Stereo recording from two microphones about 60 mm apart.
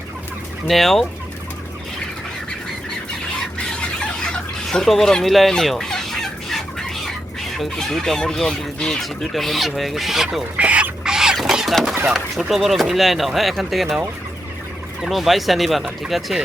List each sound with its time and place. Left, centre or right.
0.7 s speech: centre
3.6 s a sound: centre
7.5 s speech: centre
10.6 s bird: right
11.1 s chicken: centre
12.0 s speech: centre
15.0 s speech: centre